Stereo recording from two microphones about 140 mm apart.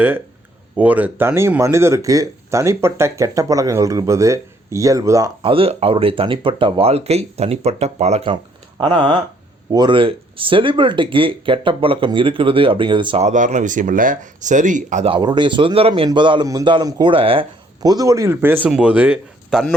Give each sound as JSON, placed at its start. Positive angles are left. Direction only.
{"t": 0.8, "sound": "speech", "side_deg": -10}
{"t": 5.4, "sound": "speech", "side_deg": -40}
{"t": 8.8, "sound": "speech", "side_deg": -35}
{"t": 13.2, "sound": "speech", "side_deg": -60}
{"t": 15.0, "sound": "speech", "side_deg": -35}
{"t": 17.8, "sound": "speech", "side_deg": -25}